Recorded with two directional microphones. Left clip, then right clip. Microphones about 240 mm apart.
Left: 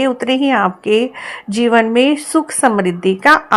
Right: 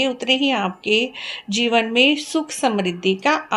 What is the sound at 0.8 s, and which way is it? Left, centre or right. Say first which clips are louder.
Speech: left 5 dB; left.